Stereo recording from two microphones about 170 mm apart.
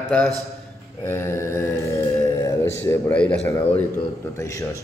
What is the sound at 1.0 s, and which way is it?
Mantra, 15° left (ahead or behind).